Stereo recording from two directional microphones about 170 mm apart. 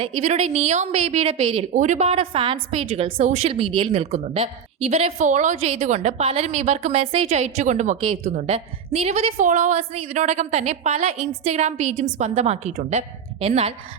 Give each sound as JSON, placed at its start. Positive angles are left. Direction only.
{"t": 0.0, "sound": "a woman's voice", "side_deg": -40}
{"t": 1.7, "sound": "a woman's voice", "side_deg": -45}